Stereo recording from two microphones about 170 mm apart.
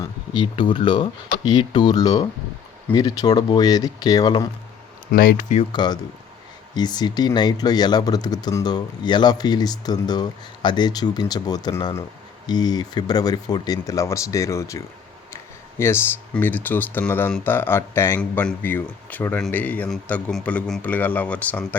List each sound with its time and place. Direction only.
0.0 s speech: 25° left (ahead or behind)
5.1 s speech: 60° left (ahead or behind)
5.5 s speech: 25° left (ahead or behind); by 21.8 s 10° left (ahead or behind)